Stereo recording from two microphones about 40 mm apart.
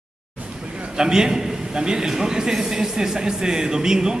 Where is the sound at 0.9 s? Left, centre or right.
Centre.